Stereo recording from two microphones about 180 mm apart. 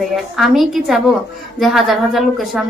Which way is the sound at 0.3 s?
Centre (ahead or behind).